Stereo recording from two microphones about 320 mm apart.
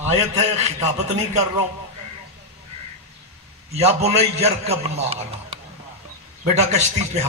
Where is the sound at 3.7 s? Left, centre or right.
Centre.